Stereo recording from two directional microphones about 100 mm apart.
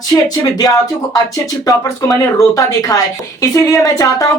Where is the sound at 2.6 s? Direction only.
35° left (ahead or behind).